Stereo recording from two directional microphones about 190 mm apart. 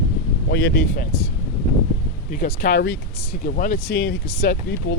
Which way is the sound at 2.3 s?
50° left (ahead or behind).